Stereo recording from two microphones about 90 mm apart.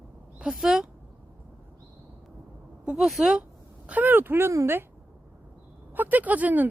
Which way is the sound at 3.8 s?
20° right (ahead or behind).